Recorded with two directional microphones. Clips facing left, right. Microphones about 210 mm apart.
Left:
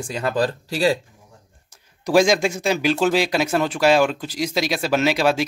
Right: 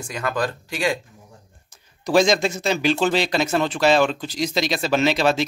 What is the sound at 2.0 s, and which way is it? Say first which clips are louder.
Speech: left 1 dB; 10° left (ahead or behind).